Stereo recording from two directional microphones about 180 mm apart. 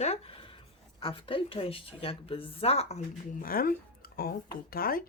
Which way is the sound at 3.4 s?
55° left (ahead or behind).